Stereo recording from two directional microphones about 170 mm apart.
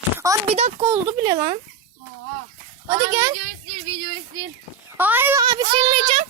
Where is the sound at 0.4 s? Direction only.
35° right (ahead or behind).